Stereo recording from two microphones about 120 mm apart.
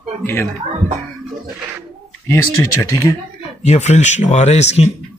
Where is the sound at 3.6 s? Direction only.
70° left (ahead or behind).